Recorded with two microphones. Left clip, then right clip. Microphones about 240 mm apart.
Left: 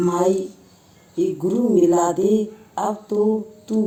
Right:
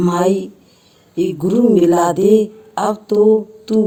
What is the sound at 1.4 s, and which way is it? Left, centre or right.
Mantra, right.